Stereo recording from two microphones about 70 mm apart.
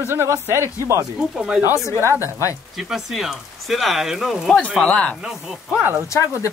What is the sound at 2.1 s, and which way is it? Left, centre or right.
Speech, right.